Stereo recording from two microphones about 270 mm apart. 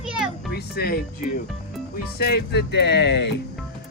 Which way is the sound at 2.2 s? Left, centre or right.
Left.